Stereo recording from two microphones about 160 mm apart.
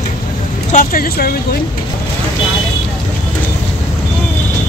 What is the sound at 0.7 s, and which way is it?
Speech, 60° left (ahead or behind).